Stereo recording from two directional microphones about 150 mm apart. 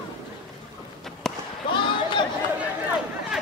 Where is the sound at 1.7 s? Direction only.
30° left (ahead or behind).